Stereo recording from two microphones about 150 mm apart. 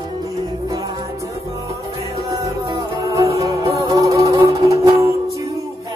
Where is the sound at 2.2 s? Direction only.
25° right (ahead or behind).